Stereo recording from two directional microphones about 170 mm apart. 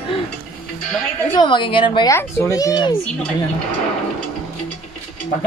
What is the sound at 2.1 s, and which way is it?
Speech, 15° left (ahead or behind).